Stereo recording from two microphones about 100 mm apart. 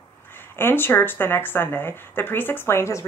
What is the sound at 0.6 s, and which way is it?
Speech, 20° left (ahead or behind).